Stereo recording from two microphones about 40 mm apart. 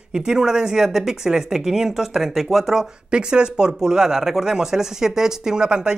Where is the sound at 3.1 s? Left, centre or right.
Right.